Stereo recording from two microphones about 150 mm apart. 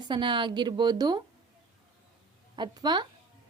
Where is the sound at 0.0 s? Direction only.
30° right (ahead or behind).